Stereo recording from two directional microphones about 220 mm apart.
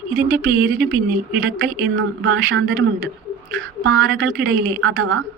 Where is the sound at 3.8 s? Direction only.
65° right (ahead or behind).